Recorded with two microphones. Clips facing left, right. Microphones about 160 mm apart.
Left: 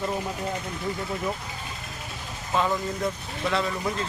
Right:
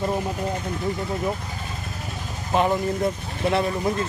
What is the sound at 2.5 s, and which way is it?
Speech, 20° right (ahead or behind).